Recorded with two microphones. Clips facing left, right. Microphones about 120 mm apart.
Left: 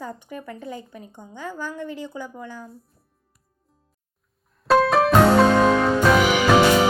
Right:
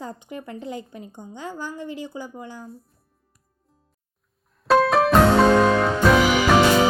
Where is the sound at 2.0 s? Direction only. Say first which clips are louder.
Even; 15° right (ahead or behind).